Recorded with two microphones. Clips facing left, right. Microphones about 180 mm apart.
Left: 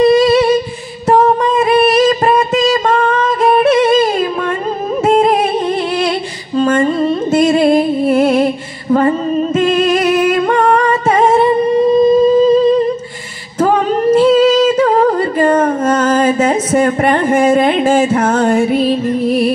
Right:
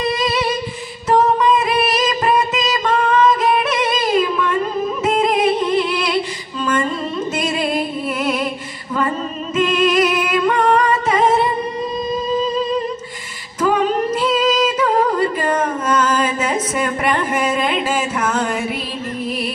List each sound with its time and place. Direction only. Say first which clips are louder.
0.0 s humming: left 11 dB; 50° left (ahead or behind)
1.0 s music: left 4 dB; 50° left (ahead or behind)
2.0 s a sound: left 6 dB; 50° left (ahead or behind)
3.7 s music: left 7 dB; 50° left (ahead or behind)
6.6 s music: left 8 dB; 50° left (ahead or behind)
9.6 s music: left 1 dB; 45° left (ahead or behind)
11.1 s singing: left 7 dB; 45° left (ahead or behind)
13.6 s female singing: left 4 dB; 45° left (ahead or behind)
14.2 s singing: left 7 dB; 30° left (ahead or behind)
14.8 s a sound: left 5 dB; 50° left (ahead or behind)